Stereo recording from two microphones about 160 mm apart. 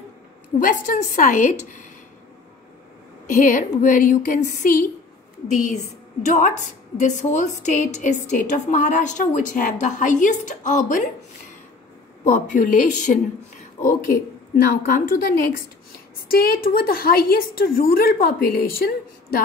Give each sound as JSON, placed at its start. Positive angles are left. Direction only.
{"t": 0.6, "sound": "a woman's voice", "side_deg": 55}
{"t": 3.3, "sound": "a woman's voice", "side_deg": 55}
{"t": 6.2, "sound": "a woman's voice", "side_deg": 50}
{"t": 12.3, "sound": "a woman's voice", "side_deg": 50}
{"t": 13.7, "sound": "a woman's voice", "side_deg": 60}